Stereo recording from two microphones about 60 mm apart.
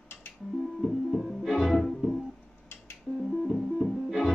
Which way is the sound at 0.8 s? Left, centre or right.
Centre.